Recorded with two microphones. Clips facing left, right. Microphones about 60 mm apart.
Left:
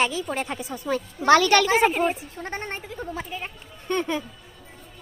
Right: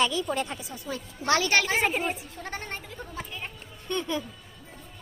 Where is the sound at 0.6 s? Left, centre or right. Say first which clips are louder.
Left 8 dB; left.